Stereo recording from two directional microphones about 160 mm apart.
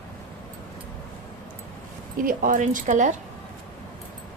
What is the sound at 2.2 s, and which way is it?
Speech, 55° right (ahead or behind).